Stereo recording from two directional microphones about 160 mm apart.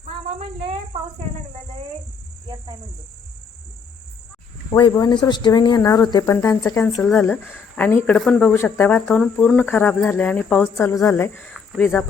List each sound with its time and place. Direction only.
0.3 s snake: 35° right (ahead or behind)
4.7 s speech: 25° left (ahead or behind); by 11.5 s 10° left (ahead or behind)
11.5 s a sound: centre (ahead or behind)